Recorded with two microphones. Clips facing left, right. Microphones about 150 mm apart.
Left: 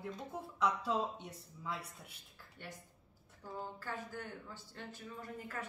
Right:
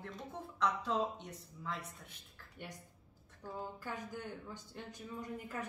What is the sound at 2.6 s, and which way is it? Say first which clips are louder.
Speech: right 1 dB; 15° right (ahead or behind).